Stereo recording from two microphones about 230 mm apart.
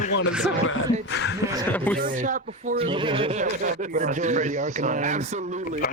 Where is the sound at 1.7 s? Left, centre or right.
Centre.